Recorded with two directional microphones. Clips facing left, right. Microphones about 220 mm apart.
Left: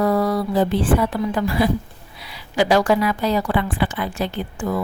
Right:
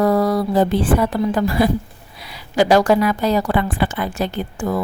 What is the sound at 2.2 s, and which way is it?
A woman's voice, 45° right (ahead or behind).